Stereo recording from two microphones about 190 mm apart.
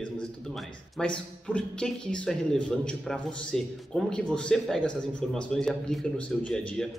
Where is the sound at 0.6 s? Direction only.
5° left (ahead or behind).